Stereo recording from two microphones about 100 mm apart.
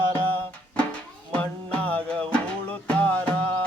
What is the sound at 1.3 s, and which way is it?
Music, 15° left (ahead or behind).